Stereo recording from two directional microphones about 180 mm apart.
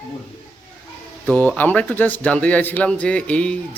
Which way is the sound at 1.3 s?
10° left (ahead or behind).